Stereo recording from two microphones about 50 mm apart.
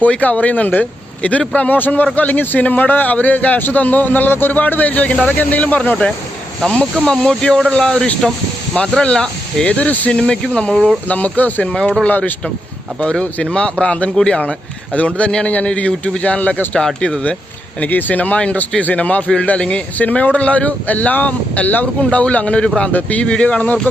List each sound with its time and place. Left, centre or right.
0.0 s a man's voice: left
7.0 s speech: centre
9.6 s a man's voice: left
10.1 s speech: centre
11.1 s a man's voice: left
11.7 s speech: centre
12.0 s a man's voice: left
13.0 s speech: left
15.9 s speech: centre
16.2 s speech: left
16.8 s speech: centre
17.7 s a man's voice: left
20.0 s speech: left